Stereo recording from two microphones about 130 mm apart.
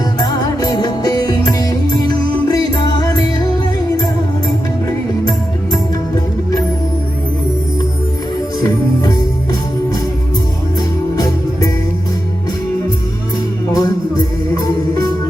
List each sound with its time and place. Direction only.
0.2 s music: 30° left (ahead or behind)
8.6 s music: 30° left (ahead or behind)
13.7 s music: 30° left (ahead or behind)